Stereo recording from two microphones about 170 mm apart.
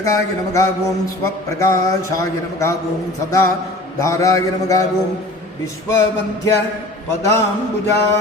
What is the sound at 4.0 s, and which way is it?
Speech, 15° left (ahead or behind).